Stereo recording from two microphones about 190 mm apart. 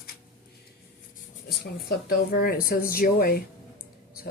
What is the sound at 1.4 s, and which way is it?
Speech, 55° left (ahead or behind).